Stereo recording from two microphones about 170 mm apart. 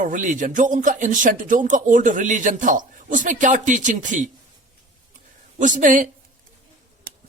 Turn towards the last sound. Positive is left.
turn(degrees=-50)  # may be behind; listen again after turning